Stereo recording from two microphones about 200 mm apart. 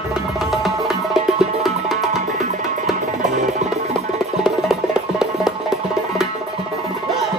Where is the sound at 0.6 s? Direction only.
Centre (ahead or behind).